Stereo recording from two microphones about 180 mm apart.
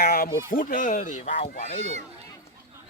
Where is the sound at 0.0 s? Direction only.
55° left (ahead or behind).